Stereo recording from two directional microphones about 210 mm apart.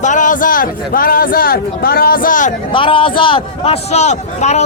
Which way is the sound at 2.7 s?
25° left (ahead or behind).